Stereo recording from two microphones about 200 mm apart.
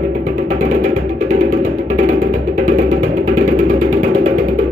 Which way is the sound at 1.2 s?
40° right (ahead or behind).